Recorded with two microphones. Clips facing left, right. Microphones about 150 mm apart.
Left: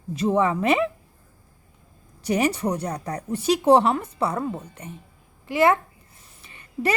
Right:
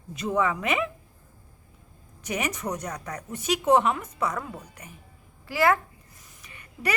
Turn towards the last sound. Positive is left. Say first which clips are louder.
# left 6 dB
turn(degrees=30)  # may be behind; listen again after turning